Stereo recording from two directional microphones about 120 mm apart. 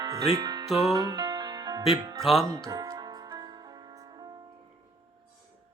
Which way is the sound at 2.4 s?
30° right (ahead or behind).